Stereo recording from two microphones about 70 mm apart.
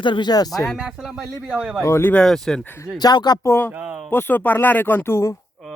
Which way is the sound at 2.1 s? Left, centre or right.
Centre.